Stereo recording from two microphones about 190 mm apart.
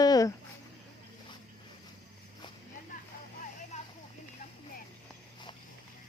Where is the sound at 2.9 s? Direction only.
45° left (ahead or behind).